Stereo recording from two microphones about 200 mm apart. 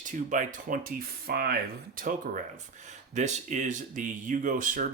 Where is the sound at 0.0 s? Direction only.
40° right (ahead or behind).